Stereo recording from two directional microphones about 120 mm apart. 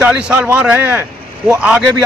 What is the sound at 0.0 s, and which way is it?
Speech, 10° right (ahead or behind).